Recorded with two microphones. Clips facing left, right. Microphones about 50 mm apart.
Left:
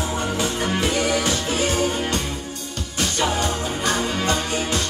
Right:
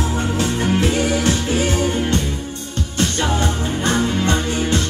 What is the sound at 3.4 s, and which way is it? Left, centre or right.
Music, right.